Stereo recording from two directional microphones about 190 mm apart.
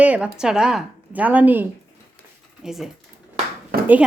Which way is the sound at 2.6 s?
Centre (ahead or behind).